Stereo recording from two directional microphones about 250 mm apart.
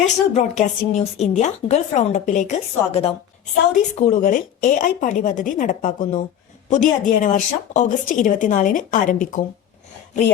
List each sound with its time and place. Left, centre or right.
0.0 s a woman's voice: left